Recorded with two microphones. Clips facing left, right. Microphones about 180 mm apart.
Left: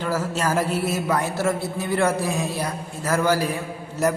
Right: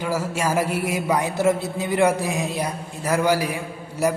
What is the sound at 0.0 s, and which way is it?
A woman's voice, 10° right (ahead or behind).